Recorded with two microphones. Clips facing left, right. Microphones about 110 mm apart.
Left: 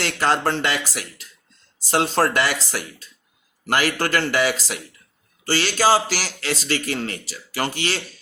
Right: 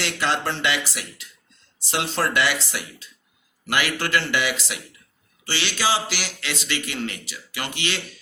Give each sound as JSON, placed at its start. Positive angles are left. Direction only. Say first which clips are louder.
{"t": 0.0, "sound": "speech", "louder": "left 4 dB", "side_deg": 45}